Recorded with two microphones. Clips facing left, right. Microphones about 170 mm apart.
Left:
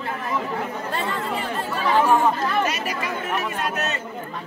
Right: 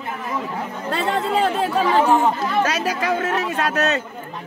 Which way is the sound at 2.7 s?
90° right.